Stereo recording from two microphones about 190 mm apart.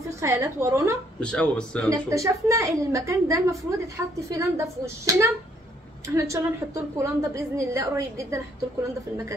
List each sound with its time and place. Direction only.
0.2 s a woman's voice: 15° right (ahead or behind)
1.2 s speech: 5° left (ahead or behind)
1.9 s a woman's voice: 15° right (ahead or behind)